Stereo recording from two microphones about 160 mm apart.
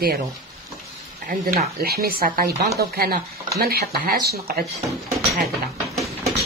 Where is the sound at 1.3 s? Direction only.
70° right (ahead or behind).